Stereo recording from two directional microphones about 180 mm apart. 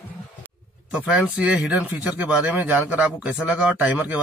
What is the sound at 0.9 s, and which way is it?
Speech, 5° right (ahead or behind).